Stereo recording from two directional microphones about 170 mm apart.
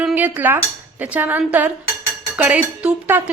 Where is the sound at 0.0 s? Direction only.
10° right (ahead or behind).